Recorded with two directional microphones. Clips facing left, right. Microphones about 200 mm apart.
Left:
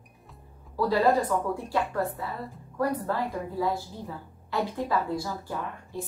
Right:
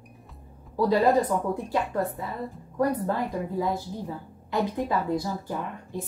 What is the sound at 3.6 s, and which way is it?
A woman's voice, 20° right (ahead or behind).